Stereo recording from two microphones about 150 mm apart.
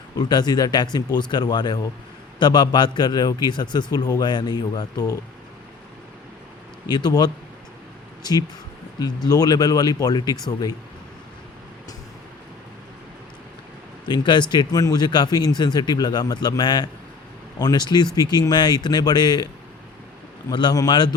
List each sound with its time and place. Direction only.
0.2 s a man's voice: 25° left (ahead or behind)
6.8 s a man's voice: 30° left (ahead or behind)
14.1 s a man's voice: 30° left (ahead or behind)
20.5 s a man's voice: 30° left (ahead or behind)